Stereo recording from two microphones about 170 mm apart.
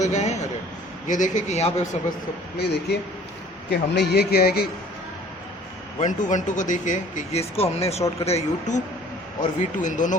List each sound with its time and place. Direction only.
0.0 s a sound: 45° left (ahead or behind)
1.0 s speech: 45° left (ahead or behind)
2.6 s a man's voice: 75° left (ahead or behind)
6.0 s speech: 45° left (ahead or behind)